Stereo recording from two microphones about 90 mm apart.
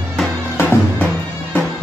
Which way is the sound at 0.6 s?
25° left (ahead or behind).